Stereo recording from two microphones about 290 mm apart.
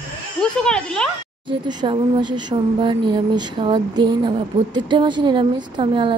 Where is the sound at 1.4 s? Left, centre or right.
Centre.